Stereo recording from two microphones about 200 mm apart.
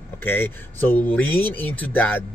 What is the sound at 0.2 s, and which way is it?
Speech, 10° left (ahead or behind).